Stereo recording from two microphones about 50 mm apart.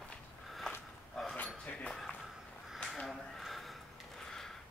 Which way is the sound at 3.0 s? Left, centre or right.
Centre.